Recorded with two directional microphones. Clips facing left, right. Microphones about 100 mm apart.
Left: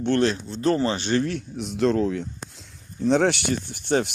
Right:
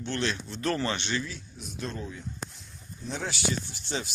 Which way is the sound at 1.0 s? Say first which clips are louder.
Left 10 dB; 55° left (ahead or behind).